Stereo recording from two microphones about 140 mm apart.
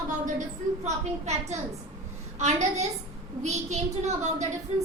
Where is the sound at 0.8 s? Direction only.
55° right (ahead or behind).